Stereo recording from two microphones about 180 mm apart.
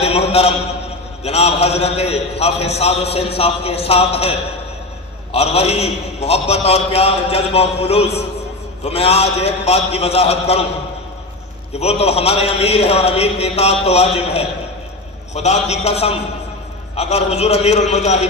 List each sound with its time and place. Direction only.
0.0 s a sound: 35° left (ahead or behind)
1.2 s a man's voice: 35° left (ahead or behind)
11.7 s a man's voice: 35° left (ahead or behind)